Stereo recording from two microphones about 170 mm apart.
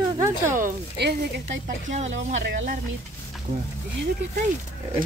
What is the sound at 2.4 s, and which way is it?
Speech, 90° right.